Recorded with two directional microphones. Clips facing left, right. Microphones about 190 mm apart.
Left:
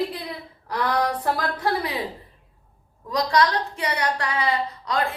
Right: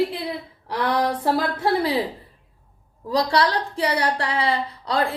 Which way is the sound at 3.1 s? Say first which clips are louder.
Right 1 dB; 30° right (ahead or behind).